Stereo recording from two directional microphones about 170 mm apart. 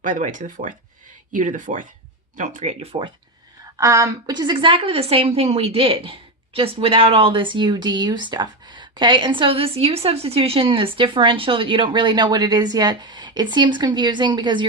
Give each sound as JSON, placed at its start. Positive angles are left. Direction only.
{"t": 0.0, "sound": "speech", "side_deg": -50}
{"t": 3.8, "sound": "a woman's voice", "side_deg": -15}